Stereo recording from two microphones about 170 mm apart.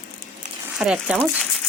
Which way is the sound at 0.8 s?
5° right (ahead or behind).